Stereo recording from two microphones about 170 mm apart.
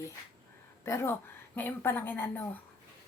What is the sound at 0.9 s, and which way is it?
Speech, 15° left (ahead or behind).